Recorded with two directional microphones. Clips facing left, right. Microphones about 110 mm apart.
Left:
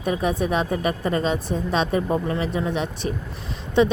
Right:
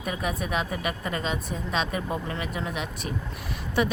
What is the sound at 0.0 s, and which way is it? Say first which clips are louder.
Speech: left 7 dB; 30° left (ahead or behind).